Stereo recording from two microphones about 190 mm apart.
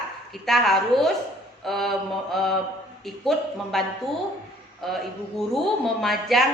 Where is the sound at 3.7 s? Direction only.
Centre (ahead or behind).